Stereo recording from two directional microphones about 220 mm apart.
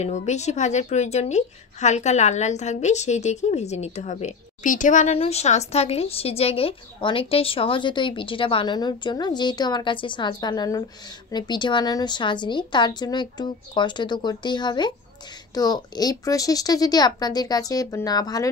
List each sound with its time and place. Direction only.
0.0 s a woman's voice: 30° left (ahead or behind)